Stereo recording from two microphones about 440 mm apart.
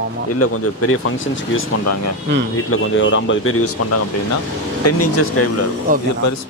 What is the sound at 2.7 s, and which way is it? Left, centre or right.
Speech, left.